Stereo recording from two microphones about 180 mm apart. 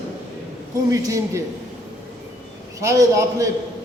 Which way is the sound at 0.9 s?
20° right (ahead or behind).